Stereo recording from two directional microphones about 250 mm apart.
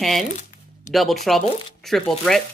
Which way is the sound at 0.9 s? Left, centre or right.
Left.